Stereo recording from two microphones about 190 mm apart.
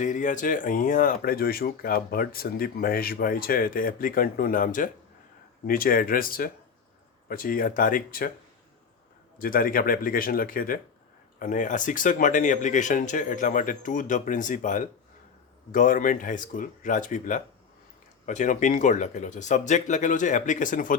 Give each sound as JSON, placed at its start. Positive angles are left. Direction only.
{"t": 0.0, "sound": "speech", "side_deg": 40}
{"t": 9.4, "sound": "speech", "side_deg": 50}